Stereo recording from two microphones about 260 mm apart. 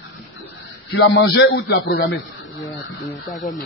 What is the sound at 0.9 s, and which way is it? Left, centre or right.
A man's voice, left.